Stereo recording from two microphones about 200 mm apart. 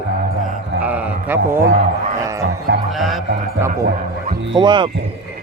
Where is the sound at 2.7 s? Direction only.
60° right (ahead or behind).